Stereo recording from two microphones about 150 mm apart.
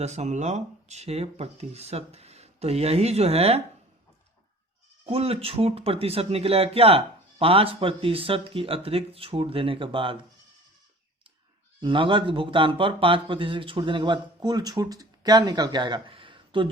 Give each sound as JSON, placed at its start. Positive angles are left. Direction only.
{"t": 0.0, "sound": "speech", "side_deg": -50}
{"t": 5.0, "sound": "speech", "side_deg": -40}
{"t": 11.8, "sound": "speech", "side_deg": -35}